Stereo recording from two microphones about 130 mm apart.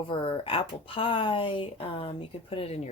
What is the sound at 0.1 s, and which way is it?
Speech, 40° left (ahead or behind).